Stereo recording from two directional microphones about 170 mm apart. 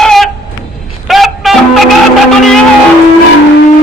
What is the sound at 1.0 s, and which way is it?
Music, centre (ahead or behind).